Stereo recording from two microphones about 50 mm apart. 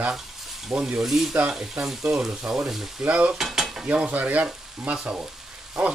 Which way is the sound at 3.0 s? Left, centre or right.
Right.